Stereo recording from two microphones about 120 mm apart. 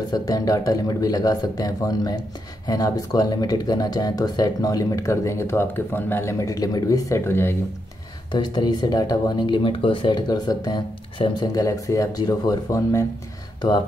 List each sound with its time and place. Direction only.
0.1 s speech: 30° left (ahead or behind)
8.3 s speech: 35° left (ahead or behind)
11.5 s speech: 30° left (ahead or behind)